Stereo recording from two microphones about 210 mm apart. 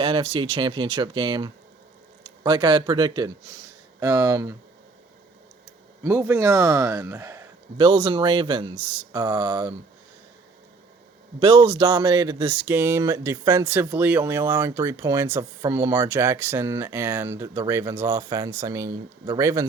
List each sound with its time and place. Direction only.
0.0 s speech: 25° right (ahead or behind)
6.0 s speech: 10° right (ahead or behind)
11.3 s speech: 25° right (ahead or behind)
12.6 s speech: 10° right (ahead or behind)